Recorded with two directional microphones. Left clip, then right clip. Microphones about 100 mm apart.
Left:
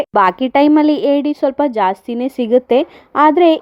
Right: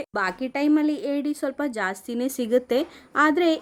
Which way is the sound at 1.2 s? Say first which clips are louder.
Left 12 dB; 45° left (ahead or behind).